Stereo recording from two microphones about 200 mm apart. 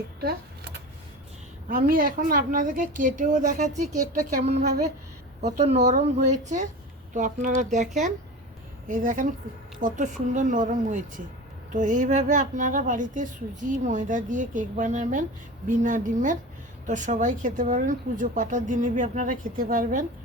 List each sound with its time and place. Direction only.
0.2 s a sound: 50° right (ahead or behind)
1.7 s a woman's voice: 45° right (ahead or behind)
8.9 s a woman's voice: 40° right (ahead or behind)